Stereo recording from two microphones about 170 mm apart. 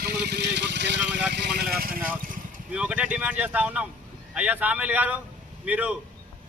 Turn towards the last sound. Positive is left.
turn(degrees=-10)  # may be behind; listen again after turning